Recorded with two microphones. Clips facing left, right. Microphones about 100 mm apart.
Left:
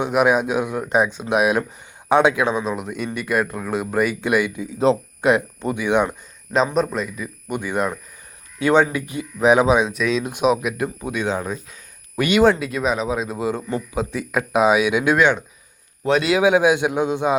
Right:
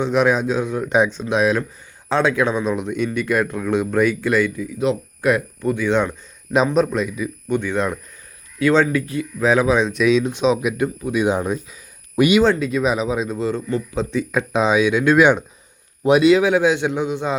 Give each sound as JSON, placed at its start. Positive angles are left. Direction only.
{"t": 0.0, "sound": "speech", "side_deg": 10}
{"t": 5.3, "sound": "speech", "side_deg": 20}
{"t": 6.7, "sound": "speech", "side_deg": 0}
{"t": 7.4, "sound": "speech", "side_deg": 10}
{"t": 9.8, "sound": "speech", "side_deg": 0}
{"t": 11.1, "sound": "speech", "side_deg": -15}
{"t": 12.4, "sound": "speech", "side_deg": 5}
{"t": 13.9, "sound": "speech", "side_deg": 10}
{"t": 15.2, "sound": "speech", "side_deg": -15}
{"t": 16.4, "sound": "speech", "side_deg": 15}